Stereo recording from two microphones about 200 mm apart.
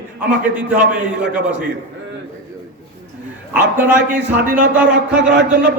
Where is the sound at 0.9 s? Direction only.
5° right (ahead or behind).